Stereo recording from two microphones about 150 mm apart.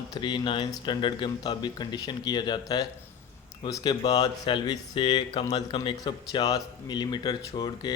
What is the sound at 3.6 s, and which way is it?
A man's voice, 30° left (ahead or behind).